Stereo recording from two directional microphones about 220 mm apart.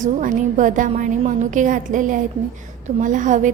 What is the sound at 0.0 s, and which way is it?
A woman's voice, 35° right (ahead or behind).